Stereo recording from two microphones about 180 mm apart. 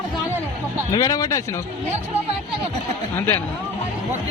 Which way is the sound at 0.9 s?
20° left (ahead or behind).